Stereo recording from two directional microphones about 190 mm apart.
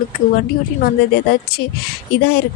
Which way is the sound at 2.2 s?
60° left (ahead or behind).